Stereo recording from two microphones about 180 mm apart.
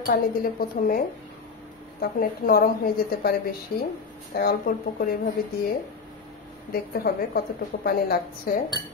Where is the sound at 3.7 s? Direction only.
55° left (ahead or behind).